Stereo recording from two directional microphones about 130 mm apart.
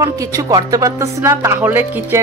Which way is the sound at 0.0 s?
30° right (ahead or behind).